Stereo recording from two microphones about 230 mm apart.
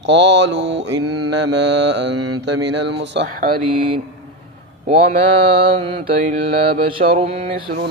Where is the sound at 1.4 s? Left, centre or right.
Right.